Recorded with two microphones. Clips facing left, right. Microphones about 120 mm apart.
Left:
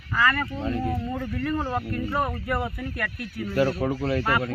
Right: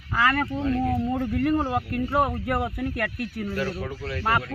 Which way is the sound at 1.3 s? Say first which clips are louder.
Right 5 dB; 55° right (ahead or behind).